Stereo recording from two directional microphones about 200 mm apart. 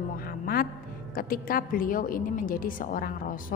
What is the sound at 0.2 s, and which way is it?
Music, 50° left (ahead or behind).